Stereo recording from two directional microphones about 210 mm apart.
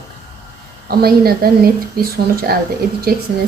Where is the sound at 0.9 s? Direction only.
45° right (ahead or behind).